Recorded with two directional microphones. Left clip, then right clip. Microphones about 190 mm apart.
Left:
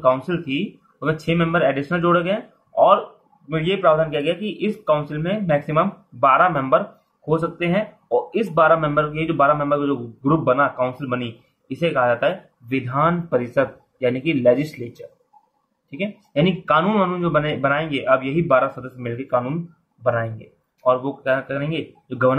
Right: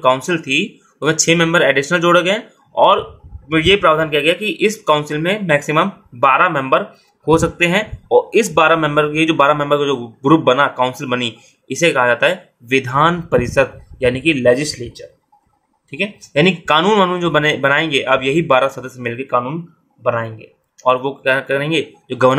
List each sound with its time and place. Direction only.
0.0 s speech: 40° right (ahead or behind)
7.2 s speech: 45° right (ahead or behind); by 14.7 s 25° right (ahead or behind)
16.0 s speech: 35° right (ahead or behind)